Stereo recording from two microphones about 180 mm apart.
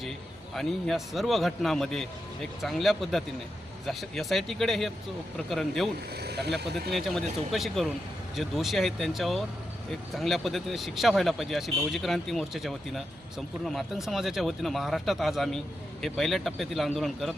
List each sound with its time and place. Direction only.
0.5 s speech: centre (ahead or behind)
6.1 s speech: 65° right (ahead or behind)
6.9 s speech: centre (ahead or behind)